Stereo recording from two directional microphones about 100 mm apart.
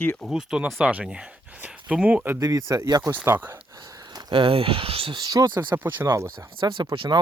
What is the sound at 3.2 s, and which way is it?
Speech, 20° right (ahead or behind).